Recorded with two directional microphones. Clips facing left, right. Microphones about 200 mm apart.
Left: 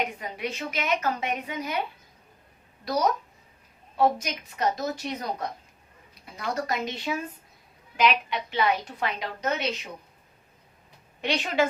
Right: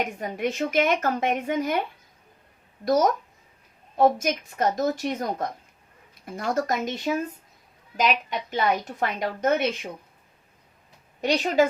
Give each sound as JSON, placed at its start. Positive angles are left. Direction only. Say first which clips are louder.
{"t": 0.2, "sound": "a woman's voice", "louder": "right 6 dB", "side_deg": -45}
{"t": 2.8, "sound": "a woman's voice", "louder": "right 4 dB", "side_deg": -45}
{"t": 11.2, "sound": "a woman's voice", "louder": "right 5 dB", "side_deg": -40}